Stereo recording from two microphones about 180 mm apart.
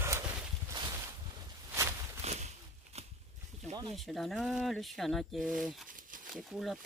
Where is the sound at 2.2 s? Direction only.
35° right (ahead or behind).